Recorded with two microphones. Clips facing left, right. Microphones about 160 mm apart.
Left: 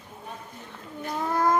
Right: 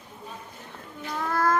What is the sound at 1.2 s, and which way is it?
Child singing, 15° left (ahead or behind).